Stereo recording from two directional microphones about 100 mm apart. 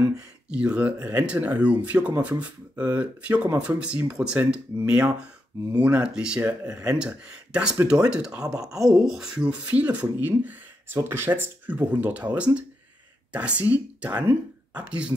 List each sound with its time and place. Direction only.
0.5 s speech: 10° right (ahead or behind)
6.4 s speech: 20° right (ahead or behind)
7.0 s speech: 10° right (ahead or behind)
13.3 s speech: 15° right (ahead or behind)